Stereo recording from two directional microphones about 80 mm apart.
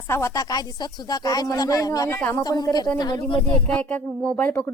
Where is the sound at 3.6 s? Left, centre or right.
Centre.